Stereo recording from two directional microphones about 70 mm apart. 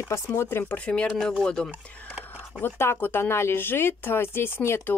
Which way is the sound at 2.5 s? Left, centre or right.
Left.